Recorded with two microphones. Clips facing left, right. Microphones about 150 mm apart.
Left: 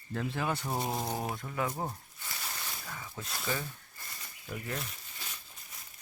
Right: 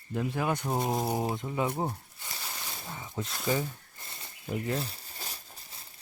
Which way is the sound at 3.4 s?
20° right (ahead or behind).